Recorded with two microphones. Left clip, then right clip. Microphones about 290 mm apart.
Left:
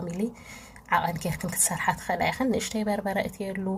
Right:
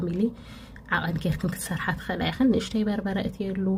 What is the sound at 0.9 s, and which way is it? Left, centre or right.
Speech, left.